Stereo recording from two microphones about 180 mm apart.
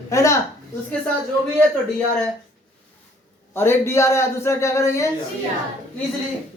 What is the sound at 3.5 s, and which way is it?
A man's voice, 15° left (ahead or behind).